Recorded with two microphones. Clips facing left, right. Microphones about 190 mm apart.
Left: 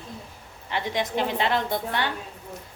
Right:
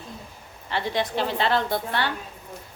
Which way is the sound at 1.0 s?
15° left (ahead or behind).